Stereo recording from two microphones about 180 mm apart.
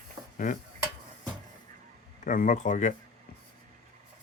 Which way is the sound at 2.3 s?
45° left (ahead or behind).